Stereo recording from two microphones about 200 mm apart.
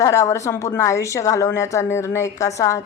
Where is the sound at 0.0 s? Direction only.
15° left (ahead or behind).